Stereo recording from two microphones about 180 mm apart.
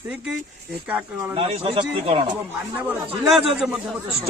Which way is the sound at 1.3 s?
30° right (ahead or behind).